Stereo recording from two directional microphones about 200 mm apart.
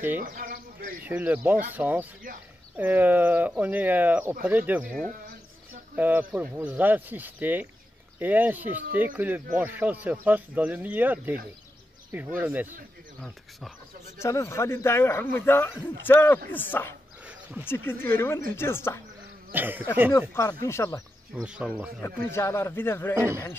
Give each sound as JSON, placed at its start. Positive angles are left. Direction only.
{"t": 0.2, "sound": "bird", "side_deg": -45}
{"t": 1.0, "sound": "speech", "side_deg": -10}
{"t": 14.1, "sound": "speech", "side_deg": 15}
{"t": 19.5, "sound": "speech", "side_deg": -10}
{"t": 20.1, "sound": "speech", "side_deg": 15}
{"t": 21.4, "sound": "speech", "side_deg": -5}
{"t": 22.0, "sound": "speech", "side_deg": 10}
{"t": 23.1, "sound": "speech", "side_deg": -15}